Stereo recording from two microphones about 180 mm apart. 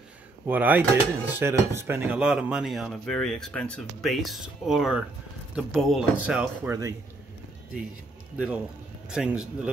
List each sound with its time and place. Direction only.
0.5 s speech: 10° right (ahead or behind)
6.7 s speech: 20° right (ahead or behind)
9.1 s speech: 5° right (ahead or behind)